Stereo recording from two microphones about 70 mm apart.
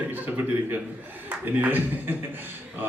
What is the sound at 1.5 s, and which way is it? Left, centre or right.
Speech, right.